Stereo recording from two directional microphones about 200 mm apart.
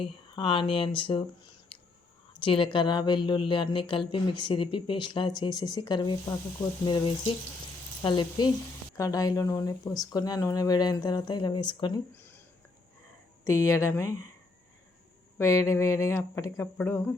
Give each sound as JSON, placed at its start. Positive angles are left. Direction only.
{"t": 0.0, "sound": "speech", "side_deg": 25}
{"t": 12.1, "sound": "a sound", "side_deg": 10}
{"t": 13.4, "sound": "speech", "side_deg": 15}
{"t": 15.4, "sound": "speech", "side_deg": 15}